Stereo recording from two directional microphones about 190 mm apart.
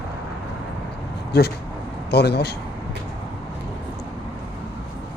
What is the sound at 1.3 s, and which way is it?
Speech, 55° left (ahead or behind).